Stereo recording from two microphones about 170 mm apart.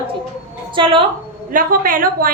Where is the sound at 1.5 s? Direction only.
55° right (ahead or behind).